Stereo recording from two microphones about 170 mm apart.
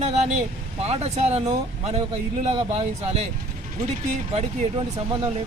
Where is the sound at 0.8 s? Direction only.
40° right (ahead or behind).